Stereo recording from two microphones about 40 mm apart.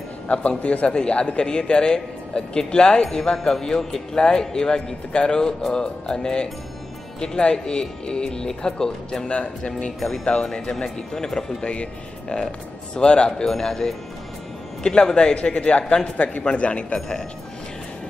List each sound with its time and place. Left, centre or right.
0.3 s a man's voice: left
9.9 s speech: centre
11.6 s a man's voice: left